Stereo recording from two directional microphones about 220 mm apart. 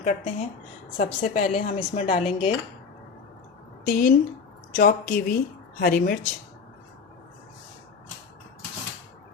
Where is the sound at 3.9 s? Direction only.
40° left (ahead or behind).